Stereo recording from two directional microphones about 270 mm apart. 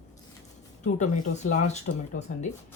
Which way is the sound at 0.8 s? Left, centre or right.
Left.